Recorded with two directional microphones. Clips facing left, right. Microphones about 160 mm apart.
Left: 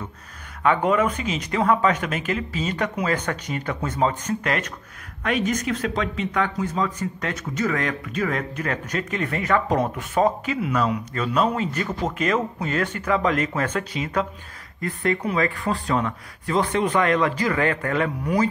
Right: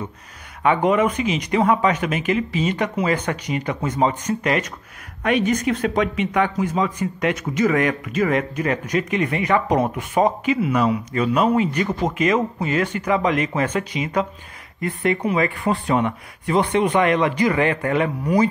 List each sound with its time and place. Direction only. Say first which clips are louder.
0.7 s a man's voice: right 2 dB; 10° right (ahead or behind)
14.8 s speech: right 3 dB; 20° right (ahead or behind)
17.0 s a man's voice: right 3 dB; 15° right (ahead or behind)